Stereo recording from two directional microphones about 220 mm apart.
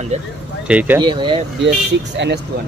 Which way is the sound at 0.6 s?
5° right (ahead or behind).